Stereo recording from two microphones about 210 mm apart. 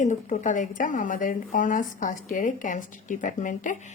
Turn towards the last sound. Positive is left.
turn(degrees=35)  # may be behind; listen again after turning